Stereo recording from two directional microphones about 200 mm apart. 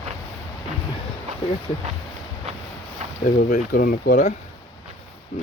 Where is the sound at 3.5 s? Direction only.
50° left (ahead or behind).